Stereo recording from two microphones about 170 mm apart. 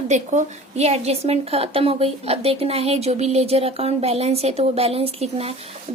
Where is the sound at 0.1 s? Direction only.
45° right (ahead or behind).